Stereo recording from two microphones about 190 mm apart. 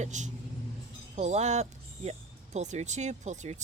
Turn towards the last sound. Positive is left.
turn(degrees=-35)  # may be behind; listen again after turning